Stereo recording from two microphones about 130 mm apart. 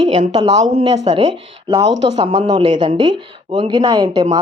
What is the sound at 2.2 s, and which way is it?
Speech, 40° right (ahead or behind).